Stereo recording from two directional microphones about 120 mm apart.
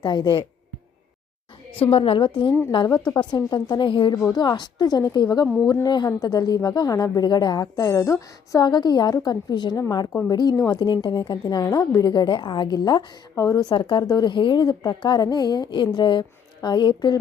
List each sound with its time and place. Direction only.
0.0 s speech: 35° left (ahead or behind)
1.7 s a woman's voice: 55° left (ahead or behind)